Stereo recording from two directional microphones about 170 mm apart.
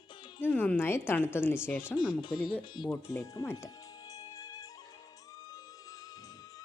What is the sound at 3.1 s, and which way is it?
Music, 20° left (ahead or behind).